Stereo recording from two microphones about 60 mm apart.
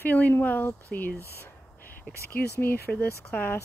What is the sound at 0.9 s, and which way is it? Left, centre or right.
Speech, centre.